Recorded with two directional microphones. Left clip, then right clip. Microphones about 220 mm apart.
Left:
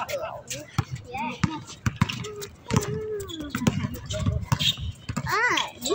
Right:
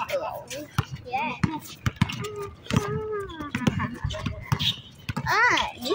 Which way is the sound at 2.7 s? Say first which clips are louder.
Left 1 dB; 35° right (ahead or behind).